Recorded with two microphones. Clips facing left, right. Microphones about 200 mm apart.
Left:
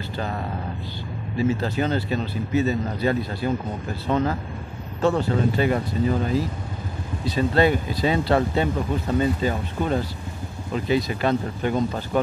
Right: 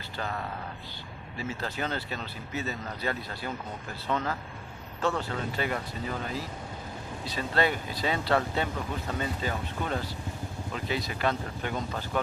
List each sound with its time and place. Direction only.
1.6 s speech: 25° left (ahead or behind)
7.3 s speech: 20° left (ahead or behind)